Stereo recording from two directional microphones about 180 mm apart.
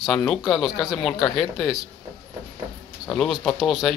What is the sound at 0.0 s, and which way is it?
Speech, centre (ahead or behind).